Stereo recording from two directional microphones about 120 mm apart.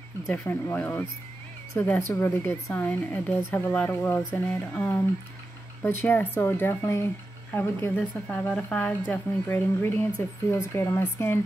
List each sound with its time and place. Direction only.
0.3 s speech: 15° left (ahead or behind)